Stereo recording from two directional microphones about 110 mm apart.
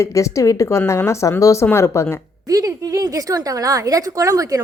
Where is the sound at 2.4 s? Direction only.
30° right (ahead or behind).